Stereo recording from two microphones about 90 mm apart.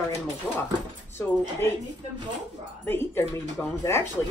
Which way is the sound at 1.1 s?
25° left (ahead or behind).